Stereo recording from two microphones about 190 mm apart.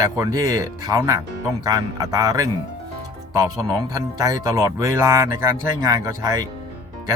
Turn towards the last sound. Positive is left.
turn(degrees=-20)  # may be behind; listen again after turning